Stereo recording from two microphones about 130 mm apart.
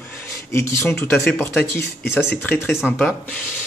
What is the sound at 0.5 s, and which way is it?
Speech, 20° left (ahead or behind).